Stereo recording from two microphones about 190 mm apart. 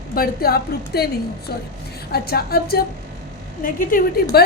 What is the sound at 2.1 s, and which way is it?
A woman's voice, 55° left (ahead or behind).